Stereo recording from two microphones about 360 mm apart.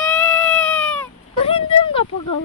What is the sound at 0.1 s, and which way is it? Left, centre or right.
Cat, centre.